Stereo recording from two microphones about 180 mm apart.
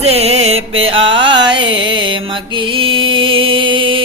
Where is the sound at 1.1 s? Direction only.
25° right (ahead or behind).